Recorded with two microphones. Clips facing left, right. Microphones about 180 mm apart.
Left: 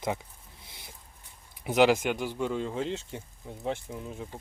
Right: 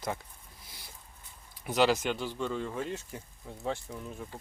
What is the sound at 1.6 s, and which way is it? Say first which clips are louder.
Speech: left 4 dB; 20° left (ahead or behind).